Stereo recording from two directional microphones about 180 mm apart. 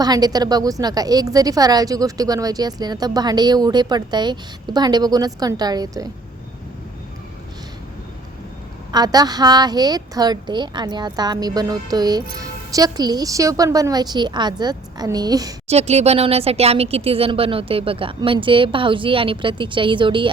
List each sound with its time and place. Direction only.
0.0 s a woman's voice: 20° right (ahead or behind)
8.9 s a woman's voice: 20° right (ahead or behind)
15.7 s speech: 35° right (ahead or behind)